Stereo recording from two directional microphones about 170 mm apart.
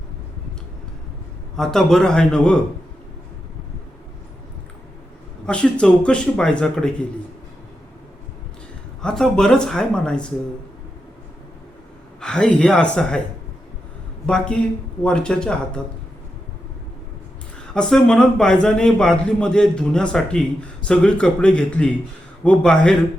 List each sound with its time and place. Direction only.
1.5 s a man's voice: centre (ahead or behind)
5.5 s a man's voice: 5° left (ahead or behind)
9.0 s a man's voice: 5° left (ahead or behind)
12.2 s a man's voice: 5° left (ahead or behind)
14.3 s a man's voice: 5° left (ahead or behind)
17.7 s a man's voice: 5° left (ahead or behind)